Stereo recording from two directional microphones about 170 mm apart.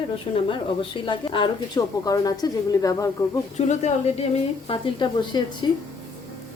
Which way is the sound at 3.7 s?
40° left (ahead or behind).